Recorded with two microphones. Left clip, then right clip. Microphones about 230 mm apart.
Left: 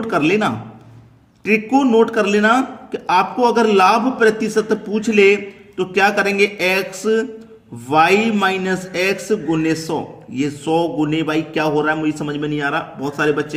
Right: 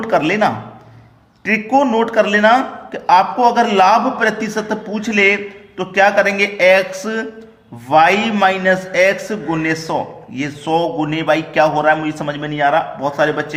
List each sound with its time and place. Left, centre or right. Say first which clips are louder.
0.0 s a man's voice: right 2 dB; centre